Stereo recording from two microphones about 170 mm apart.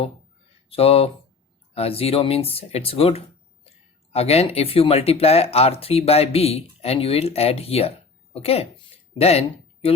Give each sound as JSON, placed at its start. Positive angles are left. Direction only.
{"t": 0.7, "sound": "speech", "side_deg": 35}